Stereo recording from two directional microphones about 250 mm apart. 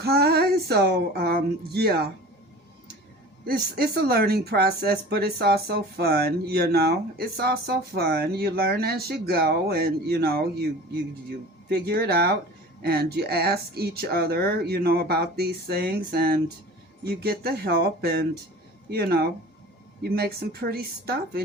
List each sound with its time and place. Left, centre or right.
0.0 s speech: right
3.4 s speech: right
11.7 s speech: right